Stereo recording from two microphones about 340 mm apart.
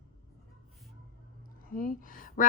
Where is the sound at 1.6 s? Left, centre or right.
Left.